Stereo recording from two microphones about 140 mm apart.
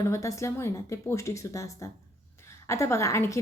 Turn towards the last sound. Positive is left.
turn(degrees=20)  # may be behind; listen again after turning